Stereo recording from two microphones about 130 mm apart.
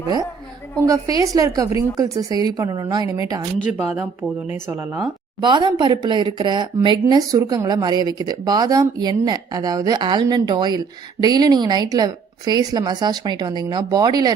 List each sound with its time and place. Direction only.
0.8 s a woman's voice: 25° right (ahead or behind)
3.7 s speech: centre (ahead or behind)
4.5 s speech: 15° right (ahead or behind)
5.4 s speech: 35° right (ahead or behind)